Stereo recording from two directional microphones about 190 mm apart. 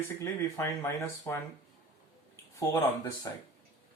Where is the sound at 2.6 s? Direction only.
20° left (ahead or behind).